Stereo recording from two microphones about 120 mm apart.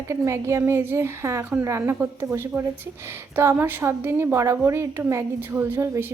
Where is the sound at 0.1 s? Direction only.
25° right (ahead or behind).